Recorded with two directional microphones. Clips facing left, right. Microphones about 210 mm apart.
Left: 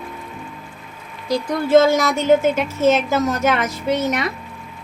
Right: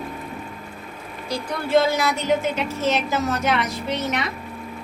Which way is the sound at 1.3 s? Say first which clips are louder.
Left 6 dB; 45° left (ahead or behind).